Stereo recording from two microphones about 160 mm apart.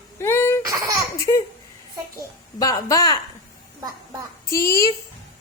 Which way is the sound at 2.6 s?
20° left (ahead or behind).